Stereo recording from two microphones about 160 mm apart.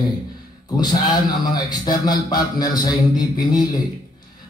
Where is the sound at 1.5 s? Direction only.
25° left (ahead or behind).